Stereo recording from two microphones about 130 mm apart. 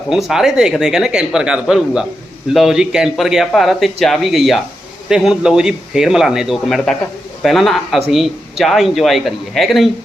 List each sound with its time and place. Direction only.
0.1 s speech: 5° right (ahead or behind)